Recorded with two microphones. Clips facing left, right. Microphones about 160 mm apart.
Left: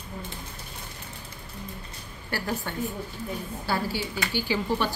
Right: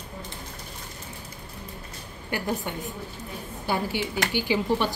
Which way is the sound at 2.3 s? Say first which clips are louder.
Right 2 dB; 15° right (ahead or behind).